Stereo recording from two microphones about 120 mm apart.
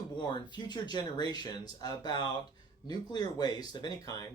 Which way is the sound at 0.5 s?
35° left (ahead or behind).